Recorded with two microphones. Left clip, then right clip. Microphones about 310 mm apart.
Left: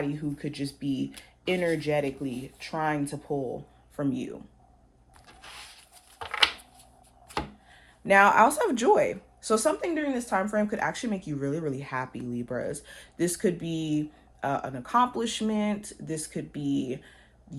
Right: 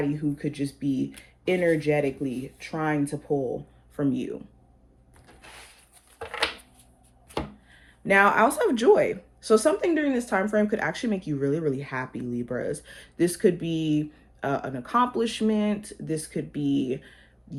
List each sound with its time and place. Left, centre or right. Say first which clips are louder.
0.0 s speech: right 4 dB; left
7.7 s speech: even; left
9.8 s speech: right 5 dB; centre